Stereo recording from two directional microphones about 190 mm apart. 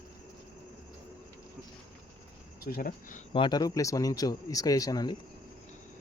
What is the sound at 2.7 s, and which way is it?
Speech, 45° left (ahead or behind).